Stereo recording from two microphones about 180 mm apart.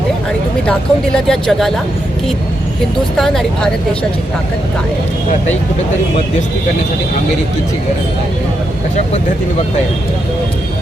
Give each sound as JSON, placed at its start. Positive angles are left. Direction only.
{"t": 0.7, "sound": "speech", "side_deg": 5}
{"t": 3.2, "sound": "speech", "side_deg": 0}